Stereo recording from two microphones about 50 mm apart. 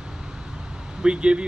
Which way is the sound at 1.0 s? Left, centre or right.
Right.